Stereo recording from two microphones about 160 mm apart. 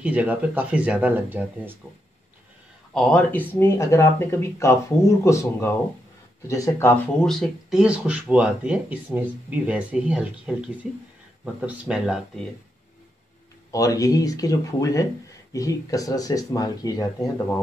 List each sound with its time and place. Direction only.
0.0 s speech: 10° right (ahead or behind)
2.9 s speech: 5° left (ahead or behind)
7.2 s speech: centre (ahead or behind)
13.7 s speech: 20° left (ahead or behind)